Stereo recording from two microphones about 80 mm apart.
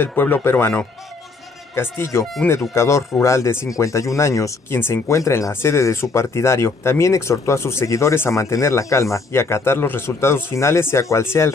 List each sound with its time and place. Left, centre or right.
0.0 s speech: left